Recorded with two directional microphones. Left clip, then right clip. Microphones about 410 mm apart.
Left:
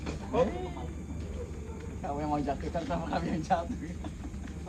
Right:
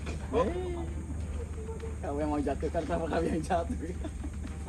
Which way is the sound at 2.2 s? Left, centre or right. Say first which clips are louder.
Right 1 dB; right.